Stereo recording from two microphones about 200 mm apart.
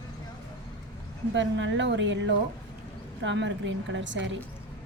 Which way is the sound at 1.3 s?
65° right (ahead or behind).